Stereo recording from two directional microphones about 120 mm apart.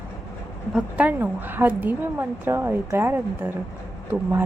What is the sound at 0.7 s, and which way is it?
A woman's voice, 15° right (ahead or behind).